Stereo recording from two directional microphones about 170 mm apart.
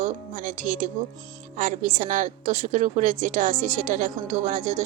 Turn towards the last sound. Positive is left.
turn(degrees=-45)  # may be behind; listen again after turning